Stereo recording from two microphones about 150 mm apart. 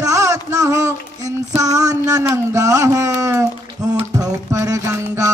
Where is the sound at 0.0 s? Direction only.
25° right (ahead or behind).